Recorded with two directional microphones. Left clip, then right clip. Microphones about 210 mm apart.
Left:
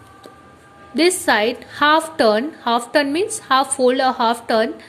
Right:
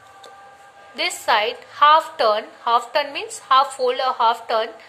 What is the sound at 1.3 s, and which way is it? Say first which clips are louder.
A woman's voice: left 2 dB; 30° left (ahead or behind).